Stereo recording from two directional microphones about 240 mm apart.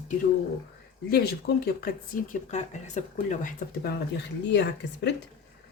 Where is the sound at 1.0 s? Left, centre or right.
Left.